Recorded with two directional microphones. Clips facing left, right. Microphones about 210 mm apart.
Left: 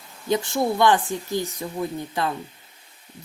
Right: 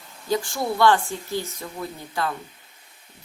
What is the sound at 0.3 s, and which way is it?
Speech, 20° left (ahead or behind).